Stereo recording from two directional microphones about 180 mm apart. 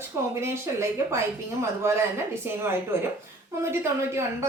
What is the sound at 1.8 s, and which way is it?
Speech, 15° right (ahead or behind).